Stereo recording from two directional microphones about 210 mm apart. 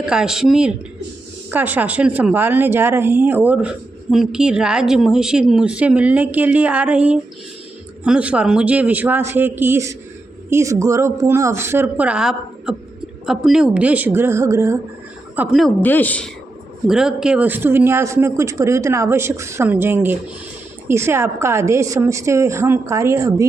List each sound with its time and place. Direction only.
0.0 s a woman's voice: 5° right (ahead or behind)
15.4 s a woman's voice: centre (ahead or behind)